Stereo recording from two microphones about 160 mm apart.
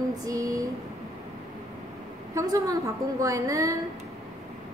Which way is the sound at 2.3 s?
20° right (ahead or behind).